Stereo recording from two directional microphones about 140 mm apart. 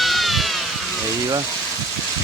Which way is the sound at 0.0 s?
Centre (ahead or behind).